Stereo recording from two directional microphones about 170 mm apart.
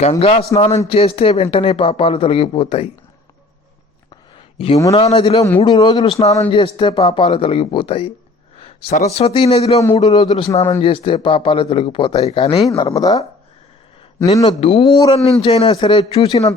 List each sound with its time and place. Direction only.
0.0 s speech: 35° left (ahead or behind)
4.5 s speech: 40° left (ahead or behind); by 13.2 s 20° left (ahead or behind)
14.6 s speech: 35° left (ahead or behind)